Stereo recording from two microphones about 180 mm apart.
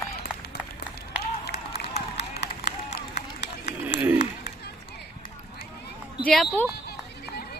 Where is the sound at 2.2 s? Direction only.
70° left (ahead or behind).